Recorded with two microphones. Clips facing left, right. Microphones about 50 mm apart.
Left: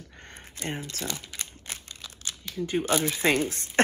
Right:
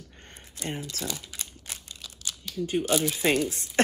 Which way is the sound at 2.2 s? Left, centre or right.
Left.